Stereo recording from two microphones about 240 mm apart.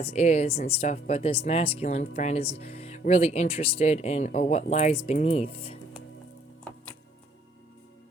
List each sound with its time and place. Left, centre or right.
0.0 s speech: left